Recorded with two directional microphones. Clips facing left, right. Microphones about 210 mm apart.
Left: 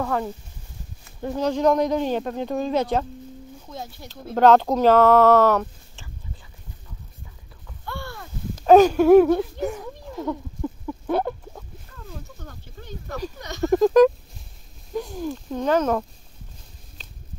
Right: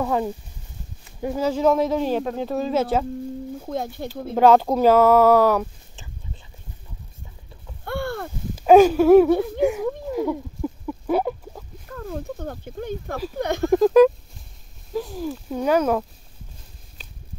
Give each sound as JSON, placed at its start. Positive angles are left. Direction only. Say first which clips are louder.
{"t": 0.0, "sound": "speech", "louder": "right 2 dB", "side_deg": -15}
{"t": 1.2, "sound": "speech", "louder": "right 1 dB", "side_deg": -5}
{"t": 3.6, "sound": "speech", "louder": "right 8 dB", "side_deg": -55}
{"t": 4.1, "sound": "speech", "louder": "even", "side_deg": -10}
{"t": 7.8, "sound": "a sound", "louder": "right 8 dB", "side_deg": -55}
{"t": 8.5, "sound": "speech", "louder": "right 1 dB", "side_deg": -10}
{"t": 9.6, "sound": "a sound", "louder": "right 7 dB", "side_deg": -10}
{"t": 12.0, "sound": "speech", "louder": "right 10 dB", "side_deg": -55}
{"t": 13.7, "sound": "speech", "louder": "right 1 dB", "side_deg": 0}
{"t": 17.0, "sound": "a sound", "louder": "right 2 dB", "side_deg": -10}